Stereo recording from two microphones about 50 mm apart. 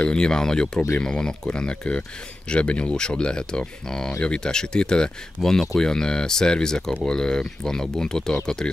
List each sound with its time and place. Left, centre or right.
0.0 s speech: centre